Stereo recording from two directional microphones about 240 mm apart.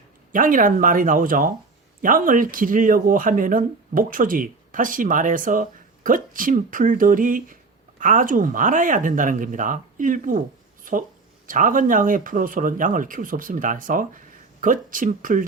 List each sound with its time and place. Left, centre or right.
0.3 s speech: right